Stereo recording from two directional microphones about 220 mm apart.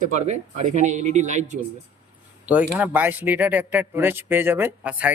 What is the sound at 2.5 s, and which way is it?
Speech, 5° right (ahead or behind).